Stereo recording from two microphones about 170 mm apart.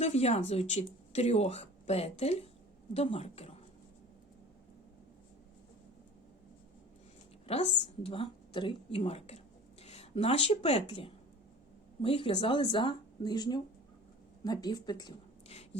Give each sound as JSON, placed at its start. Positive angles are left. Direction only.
{"t": 0.0, "sound": "speech", "side_deg": 40}
{"t": 7.4, "sound": "a woman's voice", "side_deg": 35}